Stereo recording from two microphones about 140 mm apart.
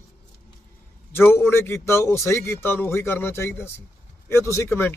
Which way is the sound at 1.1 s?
15° left (ahead or behind).